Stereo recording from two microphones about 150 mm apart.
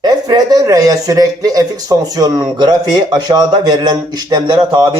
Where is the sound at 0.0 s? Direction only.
30° right (ahead or behind).